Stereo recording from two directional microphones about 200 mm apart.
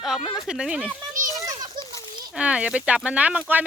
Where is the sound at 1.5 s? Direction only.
20° right (ahead or behind).